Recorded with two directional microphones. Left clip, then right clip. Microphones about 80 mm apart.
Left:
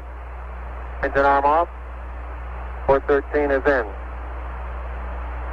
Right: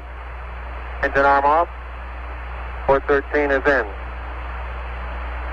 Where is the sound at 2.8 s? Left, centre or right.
Right.